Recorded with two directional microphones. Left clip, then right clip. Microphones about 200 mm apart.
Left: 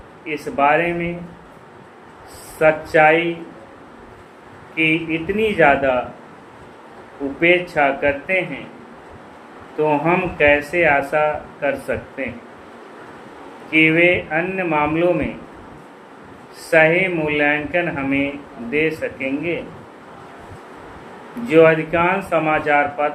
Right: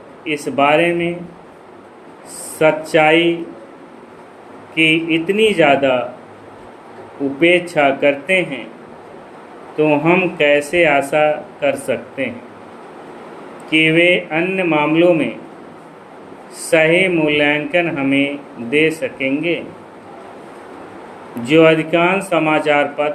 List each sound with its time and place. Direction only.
0.3 s speech: 35° right (ahead or behind)
2.6 s speech: 35° right (ahead or behind)
4.7 s speech: 35° right (ahead or behind)
7.3 s speech: 35° right (ahead or behind)
9.7 s speech: 35° right (ahead or behind)
13.7 s speech: 35° right (ahead or behind)
16.6 s speech: 35° right (ahead or behind)
21.4 s speech: 35° right (ahead or behind)